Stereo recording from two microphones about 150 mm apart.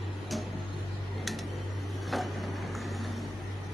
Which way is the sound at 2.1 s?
Centre (ahead or behind).